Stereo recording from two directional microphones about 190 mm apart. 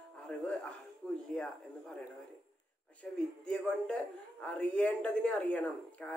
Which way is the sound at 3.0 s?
5° left (ahead or behind).